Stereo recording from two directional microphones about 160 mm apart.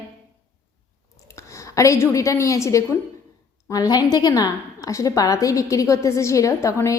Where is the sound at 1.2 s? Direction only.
20° left (ahead or behind).